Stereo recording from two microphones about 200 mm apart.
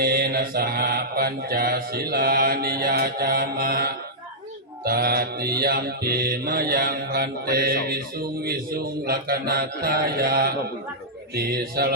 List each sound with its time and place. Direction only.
0.0 s mantra: 50° right (ahead or behind)